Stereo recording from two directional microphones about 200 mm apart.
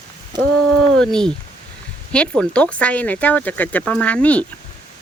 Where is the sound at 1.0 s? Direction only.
5° left (ahead or behind).